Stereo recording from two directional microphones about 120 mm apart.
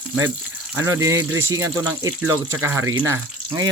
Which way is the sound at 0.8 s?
25° right (ahead or behind).